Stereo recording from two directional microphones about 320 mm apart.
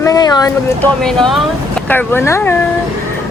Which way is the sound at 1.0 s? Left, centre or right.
Centre.